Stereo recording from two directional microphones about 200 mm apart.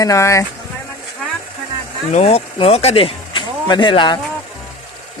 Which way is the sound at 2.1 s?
30° left (ahead or behind).